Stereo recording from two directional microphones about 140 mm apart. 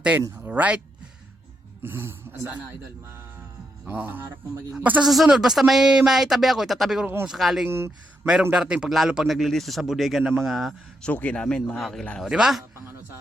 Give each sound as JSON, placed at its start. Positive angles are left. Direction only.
{"t": 0.4, "sound": "speech", "side_deg": -10}
{"t": 1.8, "sound": "a man's voice", "side_deg": -15}
{"t": 3.8, "sound": "a man's voice", "side_deg": -10}
{"t": 7.7, "sound": "speech", "side_deg": -15}
{"t": 8.5, "sound": "speech", "side_deg": -5}